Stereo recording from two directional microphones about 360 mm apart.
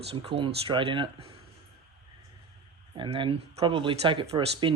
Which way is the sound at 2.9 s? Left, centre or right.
Centre.